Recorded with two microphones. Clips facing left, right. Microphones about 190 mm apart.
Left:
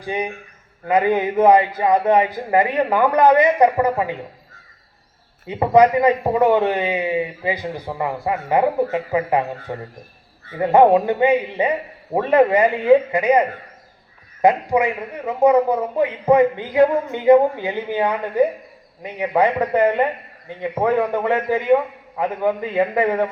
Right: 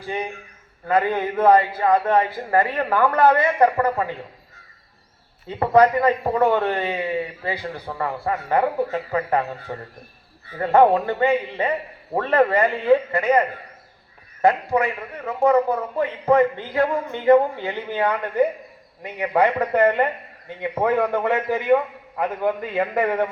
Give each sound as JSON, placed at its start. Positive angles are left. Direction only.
{"t": 0.0, "sound": "a man's voice", "side_deg": 15}
{"t": 5.5, "sound": "a man's voice", "side_deg": 15}
{"t": 14.4, "sound": "a man's voice", "side_deg": 15}